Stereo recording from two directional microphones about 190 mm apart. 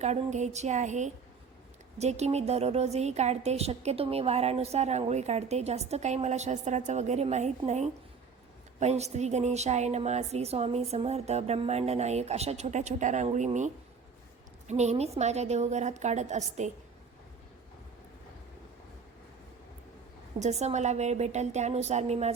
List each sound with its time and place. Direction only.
0.0 s a woman's voice: 35° right (ahead or behind)
14.7 s a woman's voice: 35° right (ahead or behind)
20.4 s a woman's voice: 35° right (ahead or behind)